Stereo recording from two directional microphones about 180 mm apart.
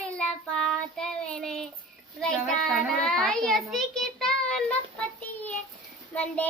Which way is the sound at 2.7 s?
5° left (ahead or behind).